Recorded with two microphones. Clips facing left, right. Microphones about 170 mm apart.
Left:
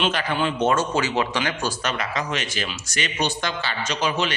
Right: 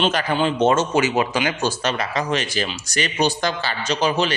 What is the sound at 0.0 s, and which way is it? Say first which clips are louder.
A man's voice: right 3 dB; 40° right (ahead or behind).